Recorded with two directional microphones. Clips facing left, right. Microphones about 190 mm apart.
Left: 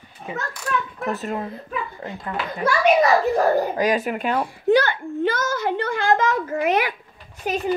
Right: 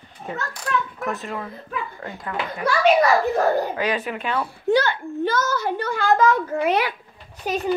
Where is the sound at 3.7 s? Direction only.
40° left (ahead or behind).